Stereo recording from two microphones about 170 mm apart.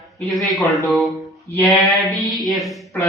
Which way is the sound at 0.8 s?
Centre (ahead or behind).